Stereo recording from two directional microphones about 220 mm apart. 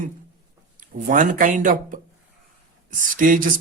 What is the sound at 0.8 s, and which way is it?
Speech, 35° right (ahead or behind).